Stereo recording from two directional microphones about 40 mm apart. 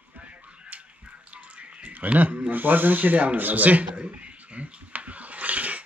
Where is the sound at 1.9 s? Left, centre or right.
Right.